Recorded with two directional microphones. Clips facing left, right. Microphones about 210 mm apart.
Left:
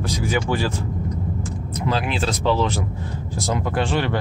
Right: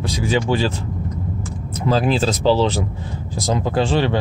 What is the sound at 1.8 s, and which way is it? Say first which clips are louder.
Speech: right 6 dB; 35° right (ahead or behind).